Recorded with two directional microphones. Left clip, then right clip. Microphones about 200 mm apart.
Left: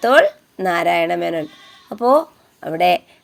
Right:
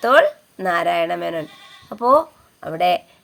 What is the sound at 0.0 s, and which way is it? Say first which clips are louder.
Speech: left 1 dB; 15° left (ahead or behind).